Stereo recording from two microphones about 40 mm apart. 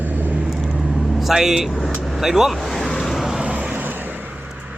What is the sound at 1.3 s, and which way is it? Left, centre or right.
Speech, centre.